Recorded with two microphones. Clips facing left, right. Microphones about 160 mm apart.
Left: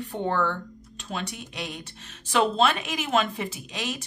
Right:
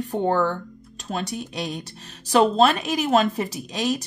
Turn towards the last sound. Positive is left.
turn(degrees=-40)  # may be behind; listen again after turning